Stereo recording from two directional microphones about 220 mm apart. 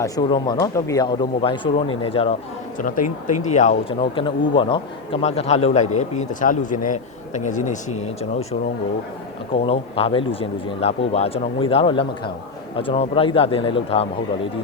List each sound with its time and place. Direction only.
0.0 s a man's voice: 20° left (ahead or behind)
2.7 s a man's voice: 40° left (ahead or behind)
9.5 s a man's voice: 25° left (ahead or behind)